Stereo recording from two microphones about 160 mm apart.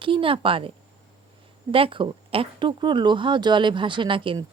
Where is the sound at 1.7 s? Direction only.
35° right (ahead or behind).